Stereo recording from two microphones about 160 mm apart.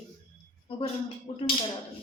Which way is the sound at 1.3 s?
35° left (ahead or behind).